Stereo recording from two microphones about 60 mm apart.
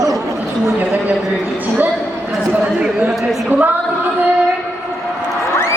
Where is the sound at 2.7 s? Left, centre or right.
Centre.